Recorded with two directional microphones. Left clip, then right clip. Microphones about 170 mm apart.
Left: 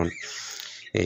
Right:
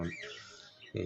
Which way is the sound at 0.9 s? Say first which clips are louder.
Left 13 dB; 45° left (ahead or behind).